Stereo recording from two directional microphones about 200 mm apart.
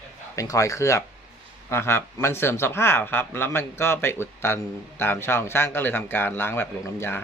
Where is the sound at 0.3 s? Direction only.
15° left (ahead or behind).